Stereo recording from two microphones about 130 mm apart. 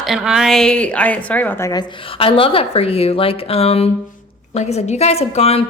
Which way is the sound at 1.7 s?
40° left (ahead or behind).